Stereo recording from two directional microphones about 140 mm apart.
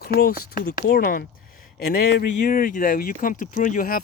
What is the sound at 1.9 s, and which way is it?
Speech, 80° left.